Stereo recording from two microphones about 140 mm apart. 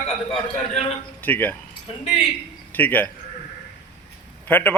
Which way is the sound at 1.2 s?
15° left (ahead or behind).